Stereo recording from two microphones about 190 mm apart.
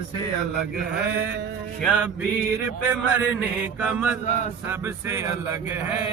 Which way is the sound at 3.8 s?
5° right (ahead or behind).